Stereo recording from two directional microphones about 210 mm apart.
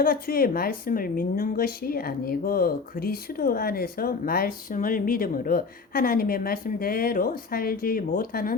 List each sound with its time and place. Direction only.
0.0 s a woman's voice: 45° left (ahead or behind)